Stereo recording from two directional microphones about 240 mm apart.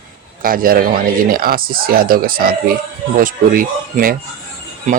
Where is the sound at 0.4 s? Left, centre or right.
Right.